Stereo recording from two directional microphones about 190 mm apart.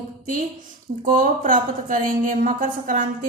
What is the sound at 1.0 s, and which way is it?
A woman's voice, 45° right (ahead or behind).